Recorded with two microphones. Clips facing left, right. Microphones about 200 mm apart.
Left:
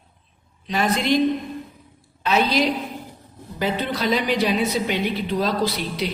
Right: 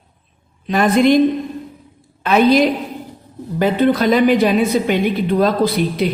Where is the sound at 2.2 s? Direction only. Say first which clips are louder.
Right 8 dB; 55° right (ahead or behind).